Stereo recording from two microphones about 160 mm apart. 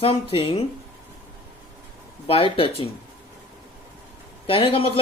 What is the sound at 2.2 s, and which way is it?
Speech, 35° left (ahead or behind).